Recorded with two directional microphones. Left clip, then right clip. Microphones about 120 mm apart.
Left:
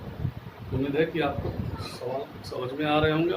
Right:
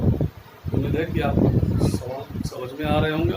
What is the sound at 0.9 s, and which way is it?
Speech, 25° right (ahead or behind).